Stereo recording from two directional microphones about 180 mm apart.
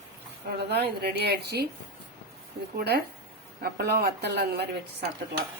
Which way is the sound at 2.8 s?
65° right (ahead or behind).